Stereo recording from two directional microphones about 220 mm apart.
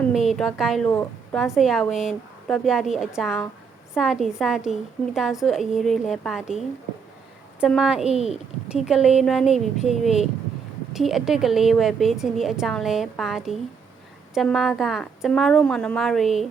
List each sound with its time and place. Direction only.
0.1 s a woman's voice: centre (ahead or behind)
7.6 s a woman's voice: 5° right (ahead or behind)
9.5 s speech: 30° left (ahead or behind)
10.0 s a woman's voice: centre (ahead or behind)